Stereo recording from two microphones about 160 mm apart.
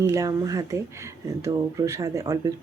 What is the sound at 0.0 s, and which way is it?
Speech, 20° right (ahead or behind).